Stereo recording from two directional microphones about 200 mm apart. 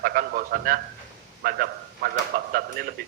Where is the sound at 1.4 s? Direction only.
50° right (ahead or behind).